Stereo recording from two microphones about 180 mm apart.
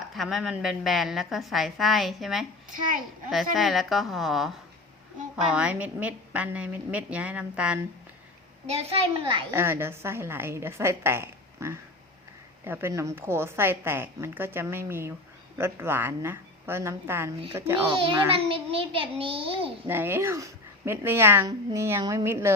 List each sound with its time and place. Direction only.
0.1 s a woman's voice: centre (ahead or behind)
3.5 s a woman's voice: centre (ahead or behind)
8.6 s a child's voice: 35° right (ahead or behind)
9.5 s a woman's voice: 15° right (ahead or behind)
17.8 s a child's voice: 30° right (ahead or behind)
19.9 s a woman's voice: 10° right (ahead or behind)